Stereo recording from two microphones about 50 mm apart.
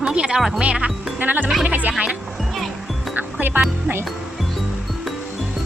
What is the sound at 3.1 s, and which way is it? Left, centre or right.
Music, right.